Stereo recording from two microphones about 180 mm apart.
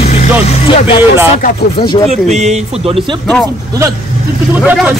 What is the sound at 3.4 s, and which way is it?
Speech, 20° right (ahead or behind).